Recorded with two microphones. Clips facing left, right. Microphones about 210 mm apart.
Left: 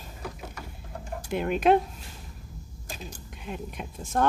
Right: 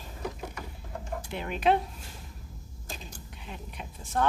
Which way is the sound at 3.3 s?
50° left (ahead or behind).